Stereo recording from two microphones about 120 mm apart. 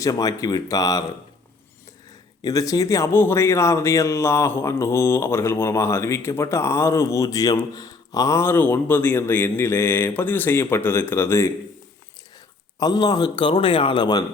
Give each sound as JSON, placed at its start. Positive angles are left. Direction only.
{"t": 0.0, "sound": "speech", "side_deg": 30}
{"t": 2.4, "sound": "speech", "side_deg": 30}
{"t": 12.8, "sound": "a man's voice", "side_deg": 35}